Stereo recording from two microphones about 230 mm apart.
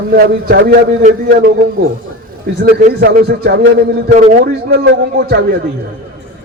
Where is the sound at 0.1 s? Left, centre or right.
Right.